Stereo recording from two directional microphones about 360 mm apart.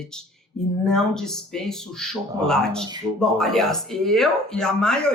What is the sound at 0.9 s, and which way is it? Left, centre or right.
Speech, centre.